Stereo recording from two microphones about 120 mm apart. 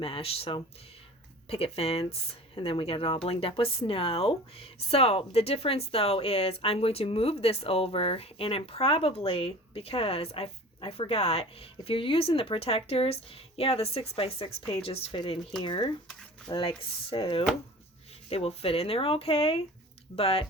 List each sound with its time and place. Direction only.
0.0 s speech: 55° left (ahead or behind)
15.6 s speech: 45° left (ahead or behind)